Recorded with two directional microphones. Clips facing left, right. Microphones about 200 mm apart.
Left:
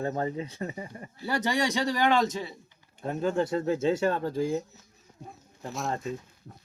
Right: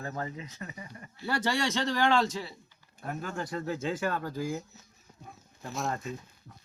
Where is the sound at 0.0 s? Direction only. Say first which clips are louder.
Left 7 dB; 30° left (ahead or behind).